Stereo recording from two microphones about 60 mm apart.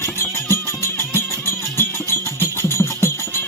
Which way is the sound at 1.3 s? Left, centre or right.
Right.